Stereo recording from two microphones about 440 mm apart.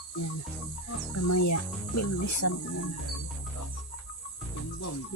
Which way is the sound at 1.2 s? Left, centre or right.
Left.